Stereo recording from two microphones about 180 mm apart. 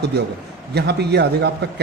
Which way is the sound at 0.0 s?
65° right (ahead or behind).